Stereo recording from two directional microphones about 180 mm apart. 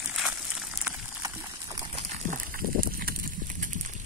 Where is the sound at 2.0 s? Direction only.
40° right (ahead or behind).